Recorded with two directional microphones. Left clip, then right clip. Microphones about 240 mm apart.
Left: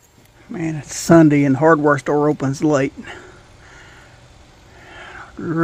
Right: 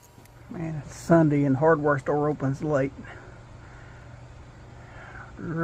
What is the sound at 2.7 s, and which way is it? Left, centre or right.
Speech, left.